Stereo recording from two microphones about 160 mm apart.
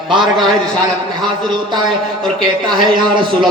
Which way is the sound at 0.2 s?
Centre (ahead or behind).